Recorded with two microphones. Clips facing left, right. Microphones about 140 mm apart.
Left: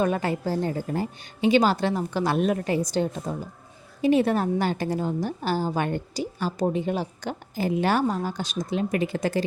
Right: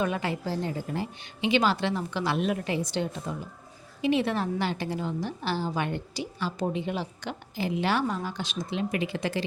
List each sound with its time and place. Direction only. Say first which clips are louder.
0.0 s a woman's voice: left 4 dB; 45° left (ahead or behind)